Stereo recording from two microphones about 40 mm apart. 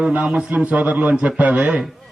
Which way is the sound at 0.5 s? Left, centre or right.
Right.